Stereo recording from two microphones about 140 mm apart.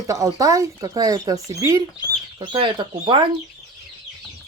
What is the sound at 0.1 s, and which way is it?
Speech, 25° right (ahead or behind).